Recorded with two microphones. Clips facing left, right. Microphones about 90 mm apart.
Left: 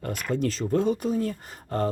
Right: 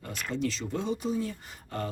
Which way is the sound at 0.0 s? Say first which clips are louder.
Left 5 dB; 50° left (ahead or behind).